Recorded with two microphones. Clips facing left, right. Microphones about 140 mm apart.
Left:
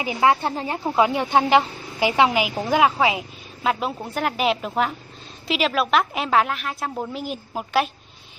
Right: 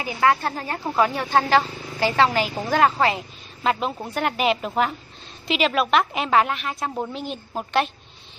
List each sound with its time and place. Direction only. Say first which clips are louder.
0.0 s a woman's voice: left 1 dB; 20° left (ahead or behind)